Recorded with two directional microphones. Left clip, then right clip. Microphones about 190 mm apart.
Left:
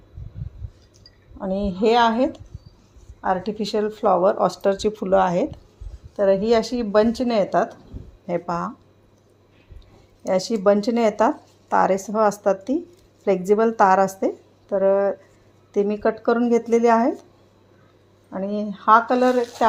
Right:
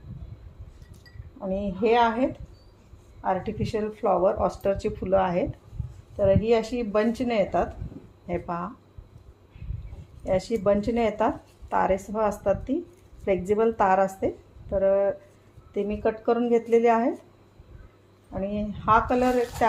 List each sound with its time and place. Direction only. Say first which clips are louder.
1.4 s a woman's voice: left 4 dB; 50° left (ahead or behind)
10.2 s speech: left 5 dB; 45° left (ahead or behind)
18.3 s speech: left 4 dB; 40° left (ahead or behind)